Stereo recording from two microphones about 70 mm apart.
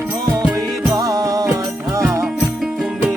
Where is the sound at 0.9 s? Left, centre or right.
Right.